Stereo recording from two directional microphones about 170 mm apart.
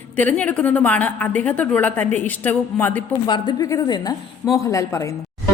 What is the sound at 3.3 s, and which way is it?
A woman's voice, 25° left (ahead or behind).